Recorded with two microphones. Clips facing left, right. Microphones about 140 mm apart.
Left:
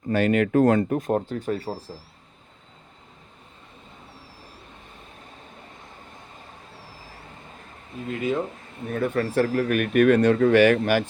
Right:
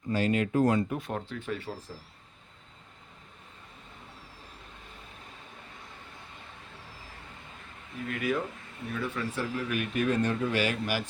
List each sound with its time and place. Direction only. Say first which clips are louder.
0.1 s speech: left 7 dB; 60° left (ahead or behind); by 1.8 s 40° left (ahead or behind)
7.9 s speech: left 5 dB; 25° left (ahead or behind)
8.9 s speech: left 9 dB; 50° left (ahead or behind)